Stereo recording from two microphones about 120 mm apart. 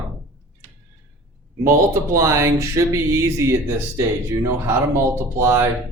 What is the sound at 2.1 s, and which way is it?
Speech, 25° right (ahead or behind).